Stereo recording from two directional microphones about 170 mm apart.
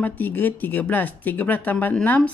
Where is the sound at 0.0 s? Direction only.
10° left (ahead or behind).